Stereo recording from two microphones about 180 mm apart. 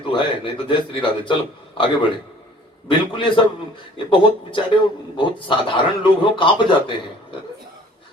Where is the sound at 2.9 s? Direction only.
25° left (ahead or behind).